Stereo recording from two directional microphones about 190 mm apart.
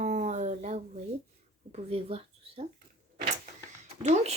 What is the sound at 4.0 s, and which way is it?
Speech, 35° right (ahead or behind).